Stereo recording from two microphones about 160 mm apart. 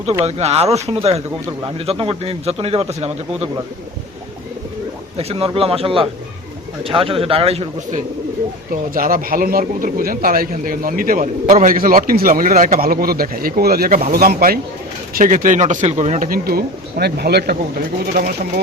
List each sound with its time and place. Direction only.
0.3 s a man's voice: 40° right (ahead or behind)
5.1 s a man's voice: 40° right (ahead or behind)
8.7 s a man's voice: 60° right (ahead or behind); by 17.6 s 80° right
18.0 s a man's voice: 65° right (ahead or behind)